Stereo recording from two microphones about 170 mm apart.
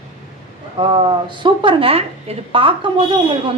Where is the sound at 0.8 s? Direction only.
30° right (ahead or behind).